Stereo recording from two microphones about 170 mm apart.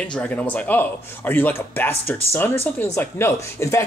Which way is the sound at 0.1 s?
10° left (ahead or behind).